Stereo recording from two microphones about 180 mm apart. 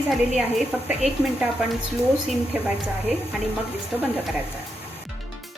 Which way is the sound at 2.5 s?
5° right (ahead or behind).